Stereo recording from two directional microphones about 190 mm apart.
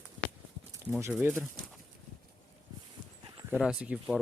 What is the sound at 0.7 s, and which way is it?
Speech, 15° right (ahead or behind).